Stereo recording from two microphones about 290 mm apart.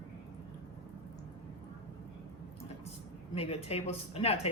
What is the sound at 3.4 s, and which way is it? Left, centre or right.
Speech, left.